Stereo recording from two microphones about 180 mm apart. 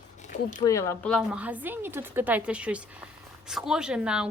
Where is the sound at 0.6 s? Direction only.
15° left (ahead or behind).